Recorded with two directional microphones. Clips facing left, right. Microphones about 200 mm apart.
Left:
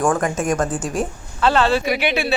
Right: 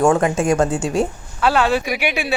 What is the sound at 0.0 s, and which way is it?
Speech, 25° right (ahead or behind).